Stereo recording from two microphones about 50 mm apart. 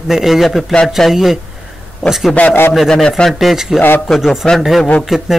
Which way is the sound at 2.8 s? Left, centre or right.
Centre.